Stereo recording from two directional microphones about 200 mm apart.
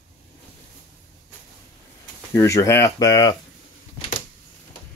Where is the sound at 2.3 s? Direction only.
15° left (ahead or behind).